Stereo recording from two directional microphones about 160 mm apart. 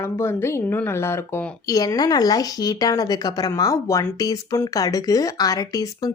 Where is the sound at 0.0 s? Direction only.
15° left (ahead or behind).